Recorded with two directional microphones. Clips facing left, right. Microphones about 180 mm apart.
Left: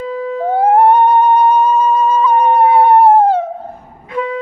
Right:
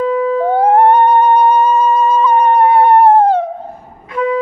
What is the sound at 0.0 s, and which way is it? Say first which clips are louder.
Theremin: right 7 dB; 65° right (ahead or behind).